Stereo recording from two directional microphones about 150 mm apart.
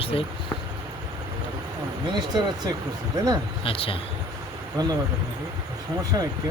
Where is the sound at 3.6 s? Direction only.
35° left (ahead or behind).